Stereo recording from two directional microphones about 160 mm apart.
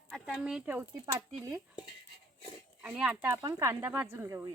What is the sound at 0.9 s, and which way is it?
Speech, 20° right (ahead or behind).